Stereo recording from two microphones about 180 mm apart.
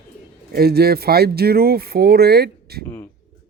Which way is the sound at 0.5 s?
60° right (ahead or behind).